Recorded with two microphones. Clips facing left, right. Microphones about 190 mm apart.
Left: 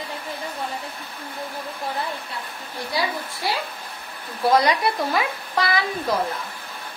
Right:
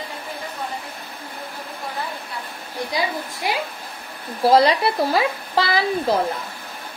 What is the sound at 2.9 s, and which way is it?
Speech, 15° right (ahead or behind).